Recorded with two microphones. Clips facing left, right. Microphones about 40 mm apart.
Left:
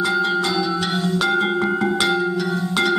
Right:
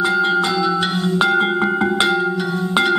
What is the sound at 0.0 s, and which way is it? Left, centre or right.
Music, centre.